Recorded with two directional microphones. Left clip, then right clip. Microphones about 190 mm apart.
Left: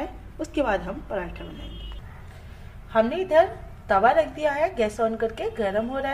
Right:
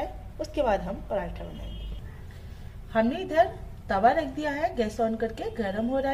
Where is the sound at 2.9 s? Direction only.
35° left (ahead or behind).